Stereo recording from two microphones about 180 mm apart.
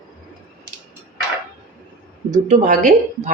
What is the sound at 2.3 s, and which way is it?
Speech, 45° right (ahead or behind).